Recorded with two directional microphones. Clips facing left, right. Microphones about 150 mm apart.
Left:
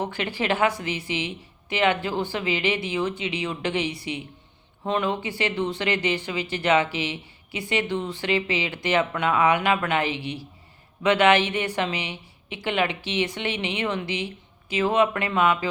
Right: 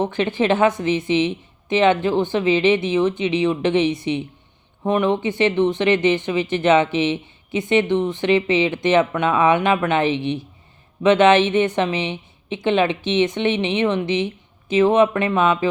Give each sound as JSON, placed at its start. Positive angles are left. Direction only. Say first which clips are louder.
{"t": 0.0, "sound": "speech", "louder": "right 8 dB", "side_deg": -20}